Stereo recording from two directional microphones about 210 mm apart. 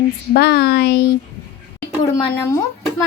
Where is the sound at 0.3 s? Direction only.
50° left (ahead or behind).